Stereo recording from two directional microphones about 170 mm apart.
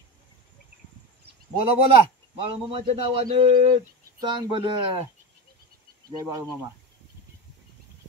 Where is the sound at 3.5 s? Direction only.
55° right (ahead or behind).